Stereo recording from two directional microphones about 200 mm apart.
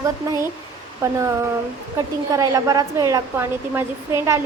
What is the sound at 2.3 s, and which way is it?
A woman's voice, 15° right (ahead or behind).